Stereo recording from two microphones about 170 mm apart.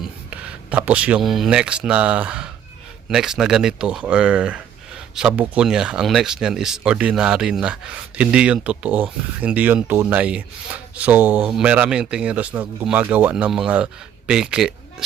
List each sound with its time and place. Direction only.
0.0 s speech: 5° right (ahead or behind)